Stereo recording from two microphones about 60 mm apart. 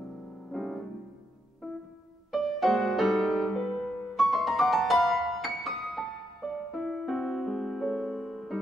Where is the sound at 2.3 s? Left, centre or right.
Centre.